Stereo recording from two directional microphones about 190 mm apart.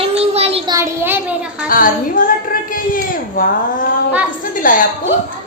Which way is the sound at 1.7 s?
45° left (ahead or behind).